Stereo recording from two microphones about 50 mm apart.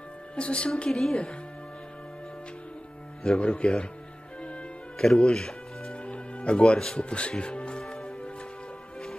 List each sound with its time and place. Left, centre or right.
0.4 s a woman's voice: left
3.3 s speech: centre
4.4 s music: left
5.0 s music: centre
7.0 s speech: left
7.9 s music: centre